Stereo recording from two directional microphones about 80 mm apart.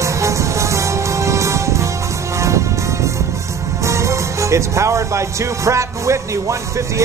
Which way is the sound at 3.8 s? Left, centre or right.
Right.